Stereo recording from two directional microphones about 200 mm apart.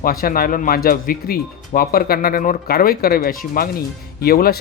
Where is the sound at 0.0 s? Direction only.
45° left (ahead or behind).